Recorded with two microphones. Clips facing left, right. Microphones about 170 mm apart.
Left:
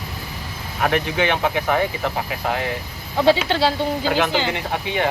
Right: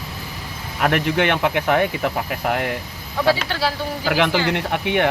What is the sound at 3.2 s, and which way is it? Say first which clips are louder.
Speech: left 3 dB; 25° left (ahead or behind).